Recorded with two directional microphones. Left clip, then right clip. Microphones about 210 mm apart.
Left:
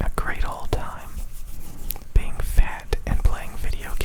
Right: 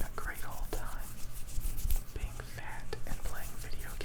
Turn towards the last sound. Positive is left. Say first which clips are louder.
# left 11 dB
turn(degrees=40)  # may be behind; listen again after turning